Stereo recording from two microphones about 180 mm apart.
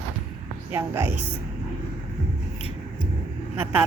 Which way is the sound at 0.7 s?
15° right (ahead or behind).